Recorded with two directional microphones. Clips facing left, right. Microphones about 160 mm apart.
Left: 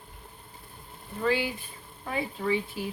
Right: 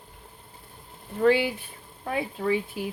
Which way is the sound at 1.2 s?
60° right (ahead or behind).